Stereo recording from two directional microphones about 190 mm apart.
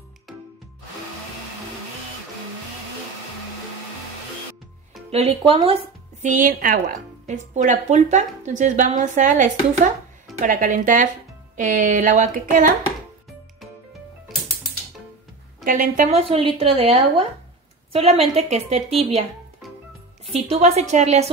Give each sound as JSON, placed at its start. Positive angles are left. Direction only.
{"t": 5.1, "sound": "speech", "side_deg": -30}
{"t": 6.2, "sound": "speech", "side_deg": -40}
{"t": 15.6, "sound": "speech", "side_deg": -50}
{"t": 16.1, "sound": "speech", "side_deg": -30}
{"t": 20.4, "sound": "speech", "side_deg": -35}